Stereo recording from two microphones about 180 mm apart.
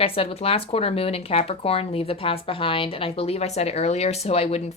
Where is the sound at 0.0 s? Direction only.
30° left (ahead or behind).